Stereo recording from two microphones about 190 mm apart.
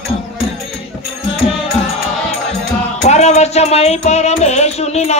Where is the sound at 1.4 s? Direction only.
30° left (ahead or behind).